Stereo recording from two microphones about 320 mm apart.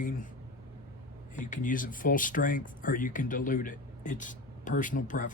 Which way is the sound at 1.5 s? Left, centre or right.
Left.